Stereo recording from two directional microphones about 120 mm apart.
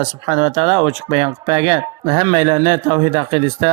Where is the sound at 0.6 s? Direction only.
35° right (ahead or behind).